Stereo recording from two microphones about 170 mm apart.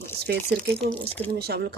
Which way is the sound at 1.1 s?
10° left (ahead or behind).